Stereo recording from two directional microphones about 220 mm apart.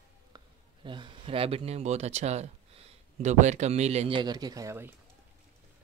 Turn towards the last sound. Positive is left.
turn(degrees=-10)  # may be behind; listen again after turning